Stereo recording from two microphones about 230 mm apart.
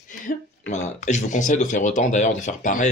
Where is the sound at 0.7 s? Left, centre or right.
Left.